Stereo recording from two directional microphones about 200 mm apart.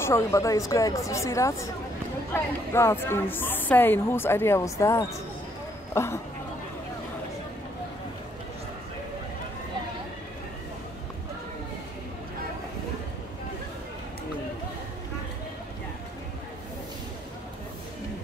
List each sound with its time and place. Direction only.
0.0 s speech: 15° left (ahead or behind)